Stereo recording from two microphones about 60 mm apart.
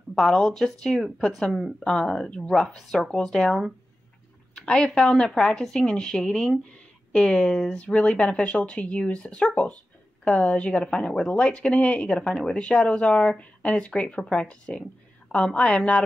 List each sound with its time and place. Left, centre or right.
0.1 s a woman's voice: centre